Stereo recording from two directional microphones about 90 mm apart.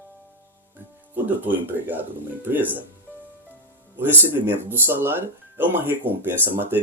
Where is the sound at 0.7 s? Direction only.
20° right (ahead or behind).